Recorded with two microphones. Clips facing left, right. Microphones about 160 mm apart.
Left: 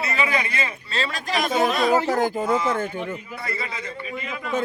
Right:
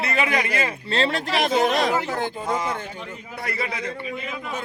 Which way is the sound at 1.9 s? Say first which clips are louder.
Left 5 dB; 40° left (ahead or behind).